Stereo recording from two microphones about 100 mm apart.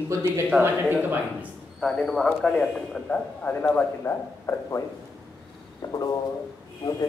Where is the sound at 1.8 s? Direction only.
5° left (ahead or behind).